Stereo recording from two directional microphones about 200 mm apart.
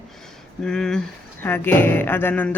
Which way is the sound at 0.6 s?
5° left (ahead or behind).